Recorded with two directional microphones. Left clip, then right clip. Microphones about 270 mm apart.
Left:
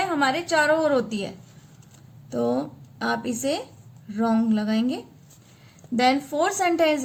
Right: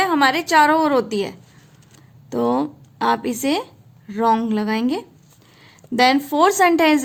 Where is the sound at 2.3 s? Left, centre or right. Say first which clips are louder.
Right 5 dB; right.